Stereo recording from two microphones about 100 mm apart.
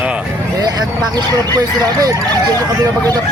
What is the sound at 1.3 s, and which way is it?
Speech, 40° right (ahead or behind).